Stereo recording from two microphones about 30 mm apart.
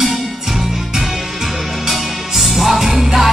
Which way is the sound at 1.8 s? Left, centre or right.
Centre.